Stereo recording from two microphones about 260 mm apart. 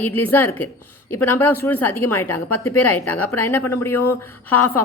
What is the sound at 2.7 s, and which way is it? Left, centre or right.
Speech, left.